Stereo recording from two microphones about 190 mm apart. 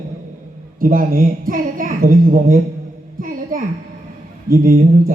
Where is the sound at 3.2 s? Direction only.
45° right (ahead or behind).